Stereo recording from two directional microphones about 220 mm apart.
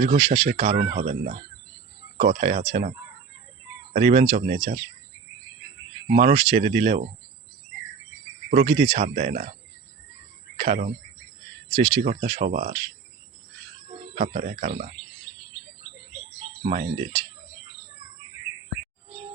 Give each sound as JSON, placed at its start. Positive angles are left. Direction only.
{"t": 0.0, "sound": "speech", "side_deg": -35}
{"t": 3.9, "sound": "speech", "side_deg": -30}
{"t": 6.1, "sound": "speech", "side_deg": -35}
{"t": 8.4, "sound": "speech", "side_deg": -35}
{"t": 10.6, "sound": "speech", "side_deg": -35}
{"t": 12.0, "sound": "speech", "side_deg": -35}
{"t": 14.2, "sound": "speech", "side_deg": -35}
{"t": 16.6, "sound": "speech", "side_deg": -30}